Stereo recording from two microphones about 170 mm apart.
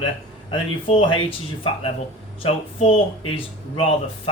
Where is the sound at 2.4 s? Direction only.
35° left (ahead or behind).